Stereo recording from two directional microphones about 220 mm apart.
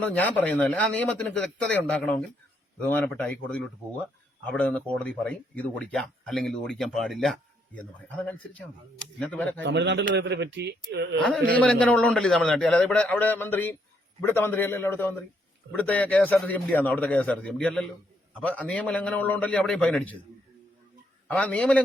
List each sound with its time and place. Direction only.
0.0 s a man's voice: 5° left (ahead or behind)
2.8 s speech: 5° left (ahead or behind)
4.4 s speech: 5° left (ahead or behind)
9.6 s a man's voice: 50° right (ahead or behind)
11.5 s a man's voice: 5° left (ahead or behind)
21.2 s speech: 5° left (ahead or behind)